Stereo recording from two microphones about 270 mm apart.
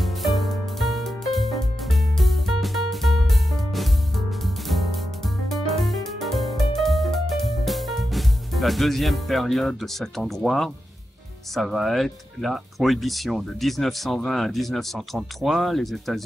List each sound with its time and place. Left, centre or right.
0.0 s music: centre
11.5 s speech: centre